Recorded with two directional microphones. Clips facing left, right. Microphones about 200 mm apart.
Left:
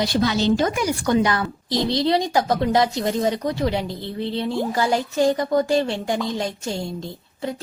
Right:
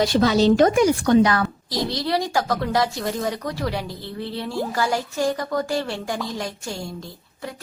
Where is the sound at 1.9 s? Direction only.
20° left (ahead or behind).